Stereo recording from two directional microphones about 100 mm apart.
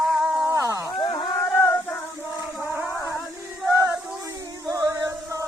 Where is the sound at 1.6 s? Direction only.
20° left (ahead or behind).